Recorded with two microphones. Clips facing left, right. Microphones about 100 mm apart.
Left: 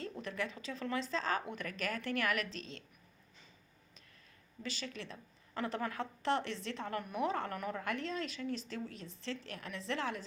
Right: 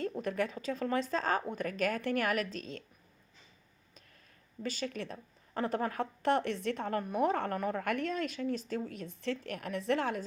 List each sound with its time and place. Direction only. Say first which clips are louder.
0.0 s a woman's voice: right 7 dB; 50° right (ahead or behind)
4.6 s a woman's voice: right 6 dB; 45° right (ahead or behind)